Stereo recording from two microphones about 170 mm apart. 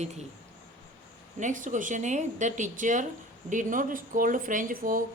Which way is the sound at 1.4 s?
45° right (ahead or behind).